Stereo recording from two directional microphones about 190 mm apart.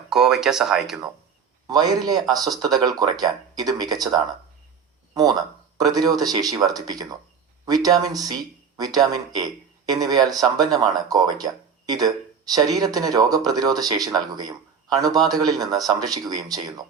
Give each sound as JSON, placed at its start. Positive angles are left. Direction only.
{"t": 0.1, "sound": "speech", "side_deg": -5}
{"t": 1.6, "sound": "speech", "side_deg": -20}
{"t": 5.7, "sound": "speech", "side_deg": -20}